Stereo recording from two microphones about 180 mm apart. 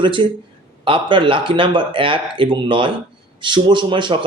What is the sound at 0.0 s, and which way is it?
Speech, 25° right (ahead or behind).